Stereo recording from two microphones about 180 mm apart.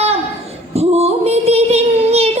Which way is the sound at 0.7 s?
35° right (ahead or behind).